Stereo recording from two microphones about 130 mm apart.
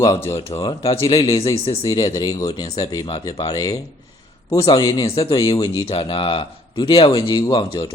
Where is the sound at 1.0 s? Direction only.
25° left (ahead or behind).